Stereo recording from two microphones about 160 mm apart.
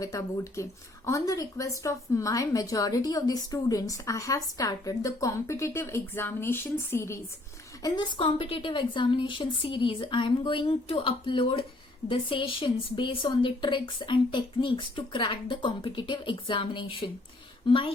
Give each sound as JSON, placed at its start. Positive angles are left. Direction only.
{"t": 0.0, "sound": "a woman's voice", "side_deg": 20}